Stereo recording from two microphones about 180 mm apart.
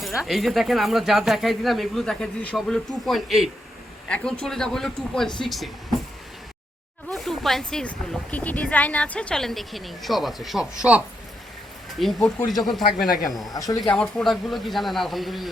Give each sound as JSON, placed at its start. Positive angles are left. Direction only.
{"t": 0.3, "sound": "speech", "side_deg": 0}
{"t": 7.1, "sound": "speech", "side_deg": 0}
{"t": 11.9, "sound": "speech", "side_deg": 0}
{"t": 13.5, "sound": "speech", "side_deg": 20}
{"t": 13.7, "sound": "speech", "side_deg": 5}